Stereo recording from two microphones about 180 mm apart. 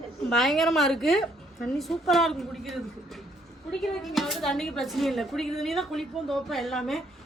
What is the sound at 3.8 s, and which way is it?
Speech, centre (ahead or behind).